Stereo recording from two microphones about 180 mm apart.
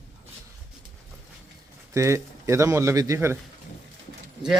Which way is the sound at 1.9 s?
15° right (ahead or behind).